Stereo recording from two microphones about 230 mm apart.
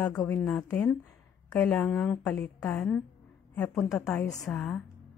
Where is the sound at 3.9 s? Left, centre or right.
Centre.